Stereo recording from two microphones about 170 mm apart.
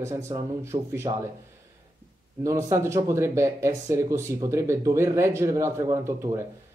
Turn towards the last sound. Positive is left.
turn(degrees=-15)  # may be behind; listen again after turning